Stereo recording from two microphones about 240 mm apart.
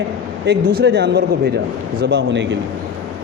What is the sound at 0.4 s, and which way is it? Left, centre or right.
A man's voice, right.